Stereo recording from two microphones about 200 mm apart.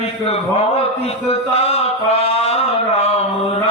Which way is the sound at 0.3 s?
30° left (ahead or behind).